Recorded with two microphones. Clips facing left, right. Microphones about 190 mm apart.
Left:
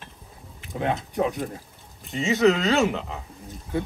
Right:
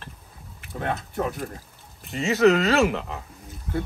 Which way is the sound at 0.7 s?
15° left (ahead or behind).